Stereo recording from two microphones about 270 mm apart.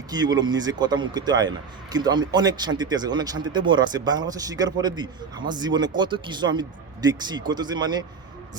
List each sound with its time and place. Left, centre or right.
0.1 s speech: centre